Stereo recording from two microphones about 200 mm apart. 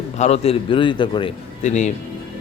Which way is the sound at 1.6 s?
35° left (ahead or behind).